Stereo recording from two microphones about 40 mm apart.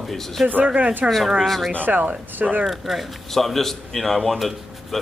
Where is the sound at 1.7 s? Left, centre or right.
Right.